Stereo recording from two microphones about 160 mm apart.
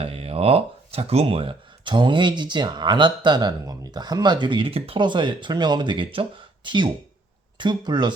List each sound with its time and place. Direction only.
0.0 s speech: 35° right (ahead or behind)